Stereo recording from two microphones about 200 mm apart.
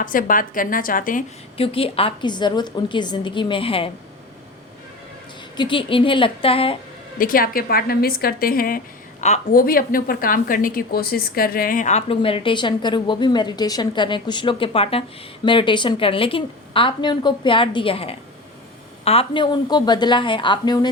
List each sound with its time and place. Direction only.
0.0 s a woman's voice: 45° left (ahead or behind)
1.5 s a woman's voice: 25° left (ahead or behind)
5.5 s a woman's voice: 25° left (ahead or behind)
7.2 s a woman's voice: 45° left (ahead or behind); by 20.9 s 20° left (ahead or behind)